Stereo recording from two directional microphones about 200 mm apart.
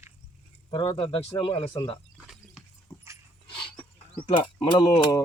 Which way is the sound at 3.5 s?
25° left (ahead or behind).